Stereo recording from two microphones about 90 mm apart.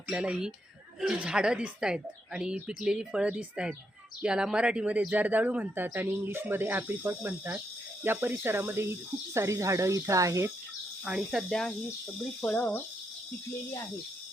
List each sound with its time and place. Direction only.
0.1 s speech: 10° right (ahead or behind); by 10.5 s 35° right (ahead or behind)
11.0 s speech: 5° right (ahead or behind)
12.5 s speech: 20° left (ahead or behind)